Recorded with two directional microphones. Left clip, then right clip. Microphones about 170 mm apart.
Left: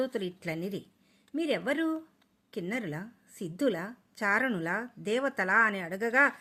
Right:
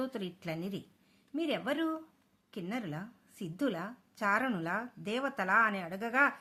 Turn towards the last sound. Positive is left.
turn(degrees=20)  # may be behind; listen again after turning